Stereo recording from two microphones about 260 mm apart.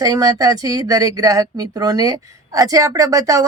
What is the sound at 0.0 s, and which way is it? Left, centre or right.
Speech, centre.